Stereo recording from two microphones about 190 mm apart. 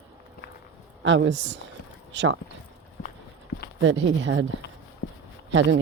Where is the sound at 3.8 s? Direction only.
75° right (ahead or behind).